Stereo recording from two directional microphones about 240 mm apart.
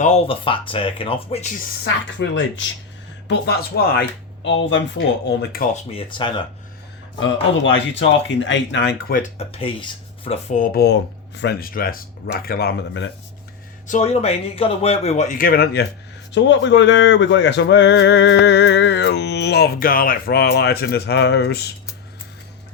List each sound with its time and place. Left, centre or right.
0.0 s speech: left
1.8 s speech: left
5.9 s speech: left
7.2 s speech: left
9.4 s speech: left
13.8 s speech: left